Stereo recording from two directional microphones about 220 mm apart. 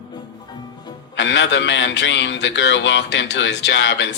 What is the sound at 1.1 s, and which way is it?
A man's voice, 55° left (ahead or behind).